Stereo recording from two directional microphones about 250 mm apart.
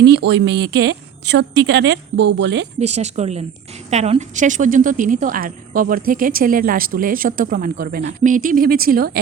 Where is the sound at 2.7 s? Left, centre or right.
Right.